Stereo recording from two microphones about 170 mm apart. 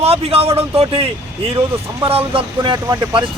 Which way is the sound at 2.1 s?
30° right (ahead or behind).